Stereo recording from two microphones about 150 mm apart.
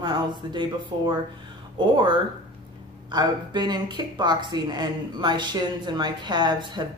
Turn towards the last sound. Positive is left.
turn(degrees=-30)  # may be behind; listen again after turning